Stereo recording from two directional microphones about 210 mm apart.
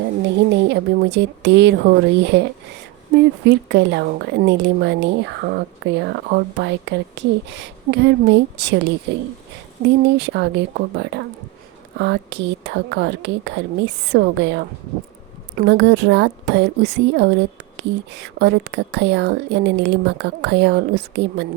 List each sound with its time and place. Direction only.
0.5 s speech: 55° right (ahead or behind)